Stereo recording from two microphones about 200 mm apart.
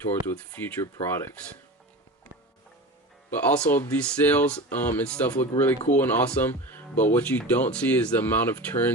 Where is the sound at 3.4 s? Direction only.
10° left (ahead or behind).